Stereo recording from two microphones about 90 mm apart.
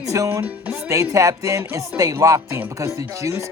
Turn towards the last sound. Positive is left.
turn(degrees=-35)  # may be behind; listen again after turning